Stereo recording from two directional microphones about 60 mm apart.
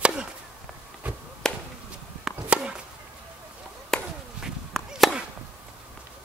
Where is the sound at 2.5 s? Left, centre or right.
Centre.